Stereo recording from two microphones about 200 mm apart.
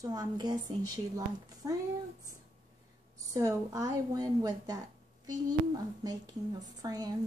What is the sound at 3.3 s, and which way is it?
Speech, 15° right (ahead or behind).